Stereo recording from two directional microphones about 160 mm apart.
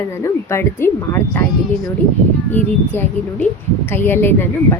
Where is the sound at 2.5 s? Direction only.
10° left (ahead or behind).